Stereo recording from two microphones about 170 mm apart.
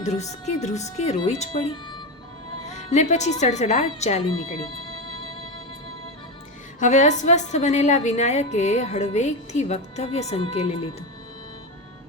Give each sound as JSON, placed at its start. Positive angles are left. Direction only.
{"t": 0.0, "sound": "speech", "side_deg": 40}
{"t": 2.6, "sound": "a woman's voice", "side_deg": 45}
{"t": 6.7, "sound": "a woman's voice", "side_deg": 45}